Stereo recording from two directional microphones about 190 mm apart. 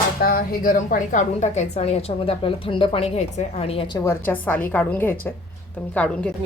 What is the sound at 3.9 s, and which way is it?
A woman's voice, 15° left (ahead or behind).